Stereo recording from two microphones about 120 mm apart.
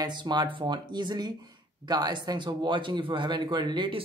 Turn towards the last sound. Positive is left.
turn(degrees=-45)  # may be behind; listen again after turning